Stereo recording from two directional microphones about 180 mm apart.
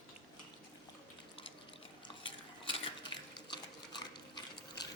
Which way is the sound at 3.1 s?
25° left (ahead or behind).